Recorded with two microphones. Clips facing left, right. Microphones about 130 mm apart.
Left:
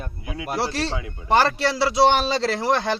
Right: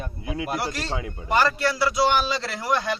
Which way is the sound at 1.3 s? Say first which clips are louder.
Left 3 dB; 30° left (ahead or behind).